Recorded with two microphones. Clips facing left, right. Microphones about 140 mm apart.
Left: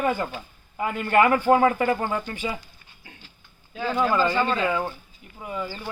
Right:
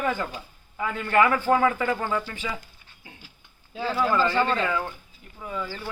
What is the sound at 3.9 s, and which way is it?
Speech, 15° left (ahead or behind).